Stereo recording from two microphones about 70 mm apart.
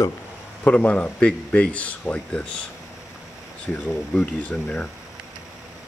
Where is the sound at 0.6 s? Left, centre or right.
Centre.